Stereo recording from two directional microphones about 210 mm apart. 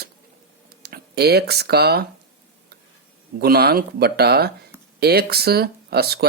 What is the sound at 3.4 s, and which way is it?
Speech, 50° right (ahead or behind).